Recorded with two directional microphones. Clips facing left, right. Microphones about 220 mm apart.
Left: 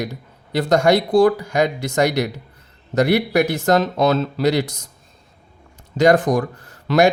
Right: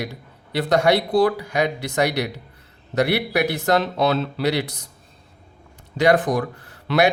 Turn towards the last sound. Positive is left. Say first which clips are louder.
# left 3 dB
turn(degrees=45)  # may be behind; listen again after turning